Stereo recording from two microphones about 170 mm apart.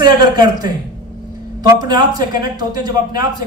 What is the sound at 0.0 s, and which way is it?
A man's voice, 25° right (ahead or behind).